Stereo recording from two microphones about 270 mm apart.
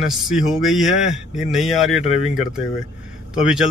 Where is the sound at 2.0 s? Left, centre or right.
Left.